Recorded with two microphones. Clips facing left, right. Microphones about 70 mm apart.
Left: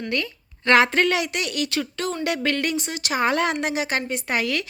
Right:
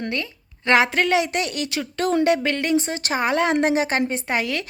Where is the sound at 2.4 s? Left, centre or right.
Right.